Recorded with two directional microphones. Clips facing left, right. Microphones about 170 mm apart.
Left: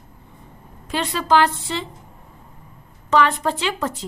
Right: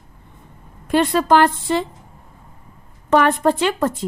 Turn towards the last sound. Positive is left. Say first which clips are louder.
# right 5 dB
turn(degrees=-50)  # may be behind; listen again after turning